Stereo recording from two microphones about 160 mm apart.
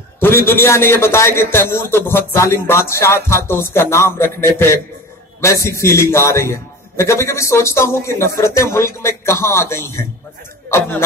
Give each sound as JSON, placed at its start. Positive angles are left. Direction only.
{"t": 0.5, "sound": "speech", "side_deg": 15}